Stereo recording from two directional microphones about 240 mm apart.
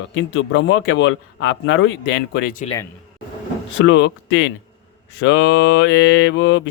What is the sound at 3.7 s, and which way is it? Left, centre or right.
A man's voice, left.